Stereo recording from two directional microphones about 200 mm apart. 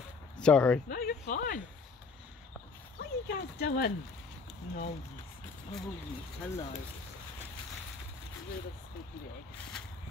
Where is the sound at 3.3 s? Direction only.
50° left (ahead or behind).